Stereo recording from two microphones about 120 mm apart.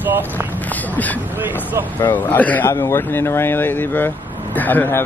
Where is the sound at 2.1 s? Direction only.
15° left (ahead or behind).